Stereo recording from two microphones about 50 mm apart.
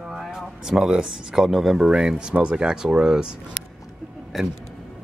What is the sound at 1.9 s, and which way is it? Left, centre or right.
Speech, centre.